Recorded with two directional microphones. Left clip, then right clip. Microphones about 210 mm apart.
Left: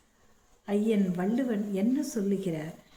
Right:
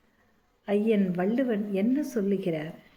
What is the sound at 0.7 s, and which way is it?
Speech, 15° left (ahead or behind).